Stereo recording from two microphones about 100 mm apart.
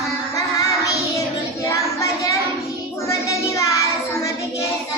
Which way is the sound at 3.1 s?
35° left (ahead or behind).